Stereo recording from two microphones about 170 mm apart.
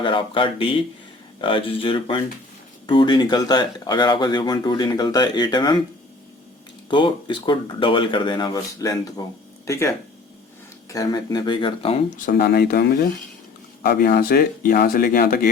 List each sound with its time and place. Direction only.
0.0 s speech: 30° left (ahead or behind)
6.9 s speech: 30° left (ahead or behind)
12.1 s speech: 60° left (ahead or behind)